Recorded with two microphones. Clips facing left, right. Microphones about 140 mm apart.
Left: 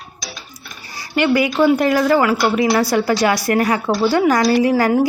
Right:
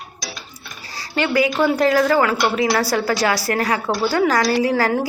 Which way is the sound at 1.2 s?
Centre (ahead or behind).